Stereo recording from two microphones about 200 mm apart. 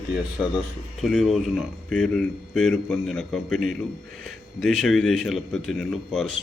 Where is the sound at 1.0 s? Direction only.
Centre (ahead or behind).